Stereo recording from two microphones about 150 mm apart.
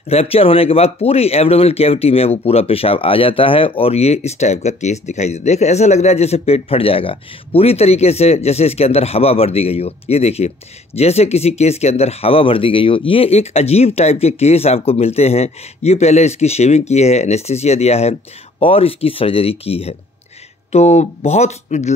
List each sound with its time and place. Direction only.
0.1 s speech: 40° left (ahead or behind)